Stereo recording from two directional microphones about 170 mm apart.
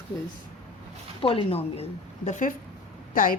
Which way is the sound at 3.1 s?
55° left (ahead or behind).